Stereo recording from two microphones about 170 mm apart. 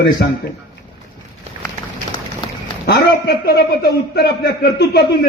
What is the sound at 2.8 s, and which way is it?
A man's voice, 70° left (ahead or behind).